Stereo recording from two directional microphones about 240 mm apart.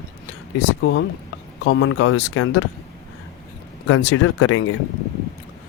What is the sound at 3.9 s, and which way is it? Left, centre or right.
Speech, left.